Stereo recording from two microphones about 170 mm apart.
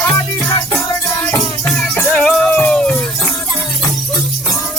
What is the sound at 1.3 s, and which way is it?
Music, centre (ahead or behind).